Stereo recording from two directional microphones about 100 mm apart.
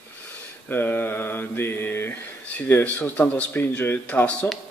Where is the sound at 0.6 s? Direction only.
20° left (ahead or behind).